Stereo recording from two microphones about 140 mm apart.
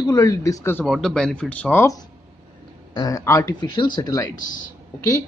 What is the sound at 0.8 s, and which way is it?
Speech, centre (ahead or behind).